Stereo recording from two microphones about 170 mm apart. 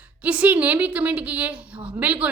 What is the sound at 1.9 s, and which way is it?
Speech, 10° right (ahead or behind).